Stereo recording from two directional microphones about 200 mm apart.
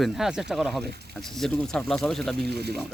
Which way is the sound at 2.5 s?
55° right (ahead or behind).